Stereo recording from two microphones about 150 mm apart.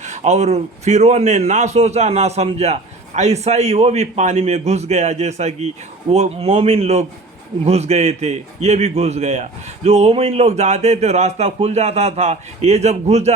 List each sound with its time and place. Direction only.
0.0 s a man's voice: 50° right (ahead or behind)